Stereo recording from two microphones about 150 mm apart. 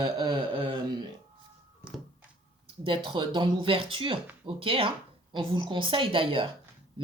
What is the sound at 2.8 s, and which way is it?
A woman's voice, 35° right (ahead or behind).